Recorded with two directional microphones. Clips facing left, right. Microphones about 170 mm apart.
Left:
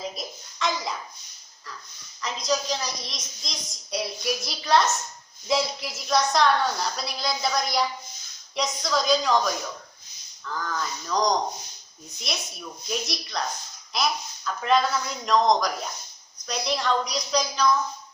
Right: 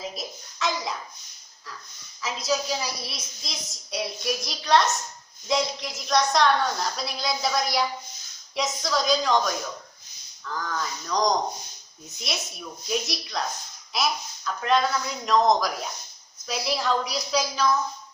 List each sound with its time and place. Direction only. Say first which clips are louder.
0.0 s hands: left 1 dB; centre (ahead or behind)
2.2 s a child's voice: even; 5° right (ahead or behind)